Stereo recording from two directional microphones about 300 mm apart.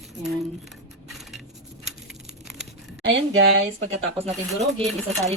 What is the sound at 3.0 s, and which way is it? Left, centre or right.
Speech, right.